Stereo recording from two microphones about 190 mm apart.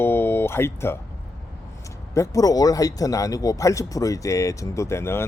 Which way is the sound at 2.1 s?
15° left (ahead or behind).